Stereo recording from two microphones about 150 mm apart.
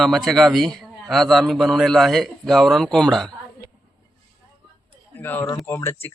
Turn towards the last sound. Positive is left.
turn(degrees=15)  # may be behind; listen again after turning